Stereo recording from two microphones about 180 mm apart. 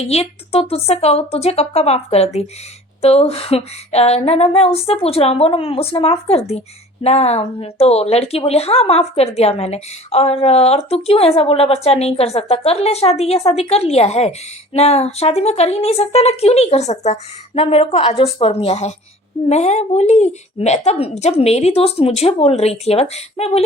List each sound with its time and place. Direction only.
0.0 s a woman's voice: 35° left (ahead or behind)